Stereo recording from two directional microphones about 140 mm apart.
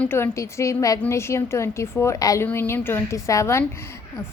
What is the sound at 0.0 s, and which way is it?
A woman's voice, 15° left (ahead or behind).